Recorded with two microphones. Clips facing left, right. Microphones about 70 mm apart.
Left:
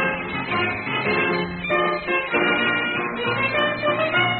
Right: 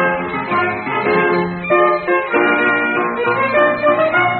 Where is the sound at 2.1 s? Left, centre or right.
Right.